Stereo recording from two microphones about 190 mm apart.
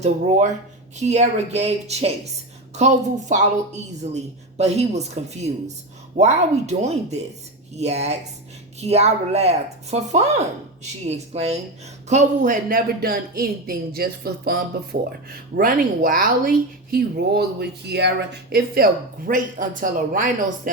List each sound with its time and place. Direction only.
0.0 s a woman's voice: 40° right (ahead or behind)